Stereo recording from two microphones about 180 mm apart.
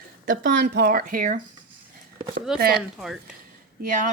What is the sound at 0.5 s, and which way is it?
Speech, 65° right (ahead or behind).